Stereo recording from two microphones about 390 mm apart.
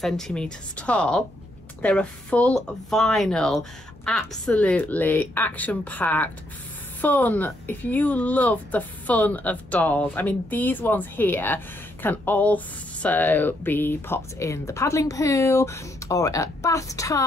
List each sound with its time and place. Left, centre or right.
0.0 s a woman's voice: centre